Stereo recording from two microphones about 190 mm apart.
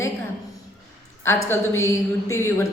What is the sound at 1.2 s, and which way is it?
A woman's voice, 15° left (ahead or behind).